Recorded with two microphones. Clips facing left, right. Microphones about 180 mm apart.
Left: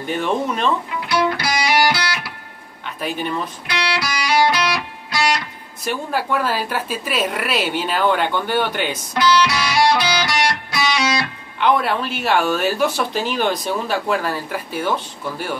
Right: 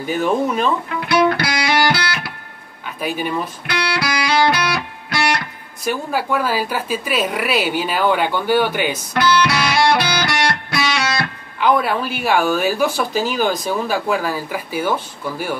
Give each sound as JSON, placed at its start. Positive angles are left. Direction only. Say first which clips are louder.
{"t": 0.0, "sound": "speech", "louder": "right 3 dB", "side_deg": -5}
{"t": 1.0, "sound": "music", "louder": "right 4 dB", "side_deg": -60}
{"t": 3.0, "sound": "speech", "louder": "right 2 dB", "side_deg": -5}
{"t": 4.0, "sound": "music", "louder": "right 1 dB", "side_deg": -60}
{"t": 5.9, "sound": "speech", "louder": "right 2 dB", "side_deg": 0}
{"t": 9.1, "sound": "music", "louder": "even", "side_deg": -60}
{"t": 11.6, "sound": "speech", "louder": "right 1 dB", "side_deg": -5}